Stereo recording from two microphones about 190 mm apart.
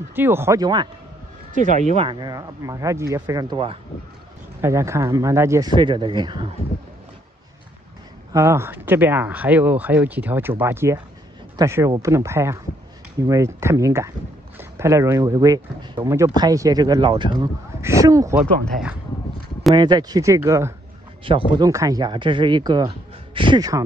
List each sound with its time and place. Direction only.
0.1 s speech: 10° right (ahead or behind)
1.5 s speech: 40° right (ahead or behind); by 6.5 s 25° right (ahead or behind)
8.3 s speech: 15° right (ahead or behind)
19.7 s speech: 20° right (ahead or behind)
21.2 s speech: 25° right (ahead or behind)